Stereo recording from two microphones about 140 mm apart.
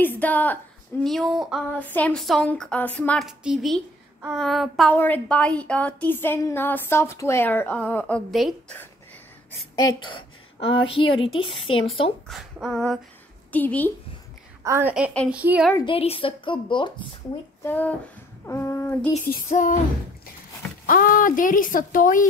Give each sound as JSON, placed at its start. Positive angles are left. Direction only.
{"t": 0.0, "sound": "a woman's voice", "side_deg": 10}
{"t": 1.0, "sound": "child singing", "side_deg": 0}
{"t": 1.8, "sound": "a woman's voice", "side_deg": 10}
{"t": 3.3, "sound": "child singing", "side_deg": 0}
{"t": 4.9, "sound": "a woman's voice", "side_deg": 10}
{"t": 8.3, "sound": "child singing", "side_deg": 0}
{"t": 9.8, "sound": "a woman's voice", "side_deg": 30}
{"t": 12.3, "sound": "a woman's voice", "side_deg": 0}
{"t": 14.6, "sound": "a woman's voice", "side_deg": -20}
{"t": 15.8, "sound": "a woman's voice", "side_deg": 40}
{"t": 17.6, "sound": "a woman's voice", "side_deg": 10}
{"t": 18.4, "sound": "a sound", "side_deg": 20}
{"t": 19.3, "sound": "speech", "side_deg": 70}
{"t": 20.8, "sound": "speech", "side_deg": 90}